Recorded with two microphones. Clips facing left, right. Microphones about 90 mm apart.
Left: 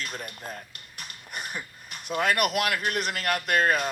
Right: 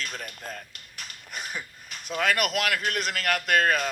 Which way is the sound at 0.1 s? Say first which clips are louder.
Even; 20° left (ahead or behind).